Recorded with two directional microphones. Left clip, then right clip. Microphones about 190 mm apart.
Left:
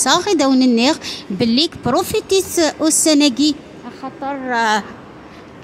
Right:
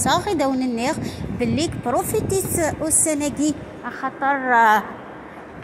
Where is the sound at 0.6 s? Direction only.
50° left (ahead or behind).